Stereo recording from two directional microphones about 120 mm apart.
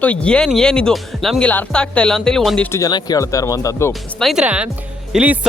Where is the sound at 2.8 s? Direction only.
35° left (ahead or behind).